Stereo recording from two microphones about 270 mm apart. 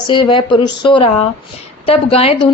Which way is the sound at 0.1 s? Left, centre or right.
Centre.